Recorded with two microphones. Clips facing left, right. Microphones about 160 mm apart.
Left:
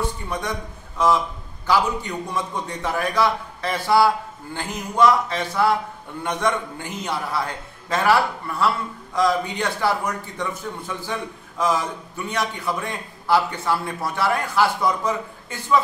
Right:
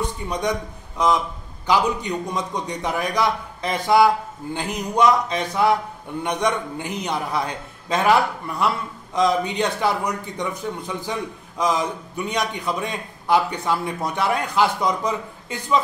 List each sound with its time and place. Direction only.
0.0 s a man's voice: 20° right (ahead or behind)